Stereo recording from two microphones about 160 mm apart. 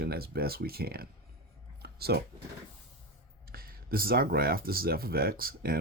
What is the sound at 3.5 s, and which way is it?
Speech, 70° right (ahead or behind).